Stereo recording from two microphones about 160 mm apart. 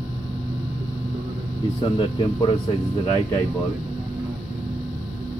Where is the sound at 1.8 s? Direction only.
35° left (ahead or behind).